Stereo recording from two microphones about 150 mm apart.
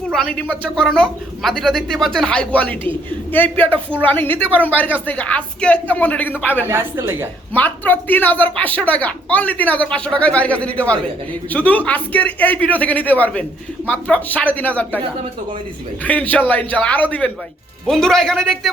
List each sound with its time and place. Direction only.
0.1 s speech: 5° left (ahead or behind)
6.7 s speech: 15° right (ahead or behind)
7.5 s speech: 10° left (ahead or behind)
16.0 s speech: 10° left (ahead or behind)